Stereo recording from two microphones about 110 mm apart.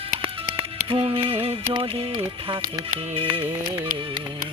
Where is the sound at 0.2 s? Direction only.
55° right (ahead or behind).